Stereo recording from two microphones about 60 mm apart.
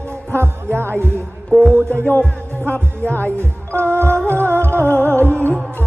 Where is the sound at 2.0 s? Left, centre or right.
Left.